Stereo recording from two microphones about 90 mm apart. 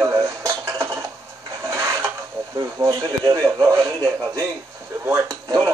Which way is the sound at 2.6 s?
35° right (ahead or behind).